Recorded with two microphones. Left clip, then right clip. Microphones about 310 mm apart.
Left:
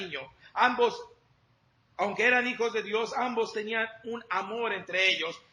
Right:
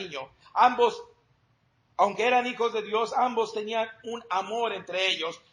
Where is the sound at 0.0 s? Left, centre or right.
Centre.